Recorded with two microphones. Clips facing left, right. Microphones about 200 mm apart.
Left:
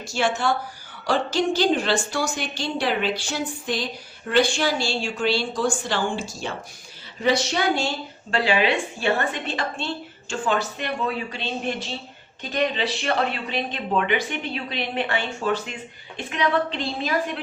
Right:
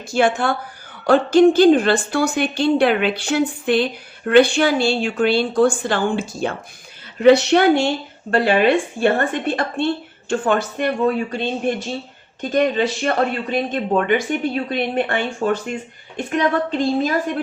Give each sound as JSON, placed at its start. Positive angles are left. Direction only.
{"t": 0.1, "sound": "a woman's voice", "side_deg": -55}